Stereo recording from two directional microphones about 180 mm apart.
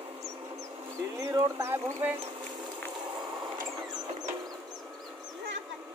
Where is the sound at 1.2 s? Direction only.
15° right (ahead or behind).